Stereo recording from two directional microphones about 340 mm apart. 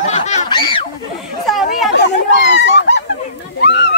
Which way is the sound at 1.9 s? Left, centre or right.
Left.